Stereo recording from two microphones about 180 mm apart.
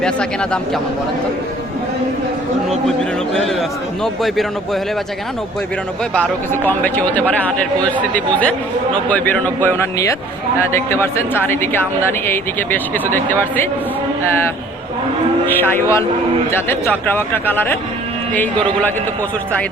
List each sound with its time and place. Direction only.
0.0 s speech: 5° left (ahead or behind)
2.8 s a man's voice: 5° left (ahead or behind)
6.1 s speech: 10° left (ahead or behind)
15.4 s speech: 10° left (ahead or behind)